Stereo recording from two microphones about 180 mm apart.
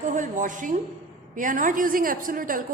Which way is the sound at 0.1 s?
45° right (ahead or behind).